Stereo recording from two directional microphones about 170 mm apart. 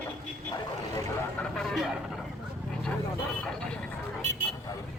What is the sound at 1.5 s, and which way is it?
Speech, 5° left (ahead or behind).